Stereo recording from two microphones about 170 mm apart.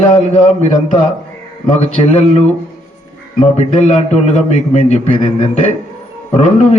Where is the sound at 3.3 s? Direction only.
40° left (ahead or behind).